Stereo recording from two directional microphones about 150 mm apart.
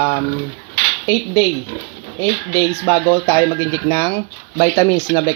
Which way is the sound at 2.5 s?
20° left (ahead or behind).